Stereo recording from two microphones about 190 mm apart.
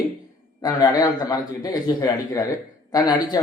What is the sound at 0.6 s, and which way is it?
A man's voice, 20° left (ahead or behind).